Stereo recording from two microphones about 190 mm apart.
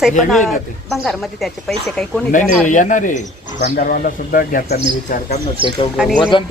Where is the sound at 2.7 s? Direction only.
40° left (ahead or behind).